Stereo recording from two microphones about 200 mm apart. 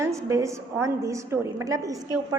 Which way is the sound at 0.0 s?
15° right (ahead or behind).